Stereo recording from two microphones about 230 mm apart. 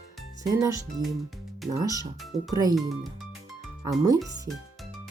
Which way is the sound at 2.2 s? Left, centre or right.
Centre.